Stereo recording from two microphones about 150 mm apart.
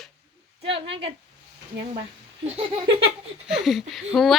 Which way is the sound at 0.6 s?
35° right (ahead or behind).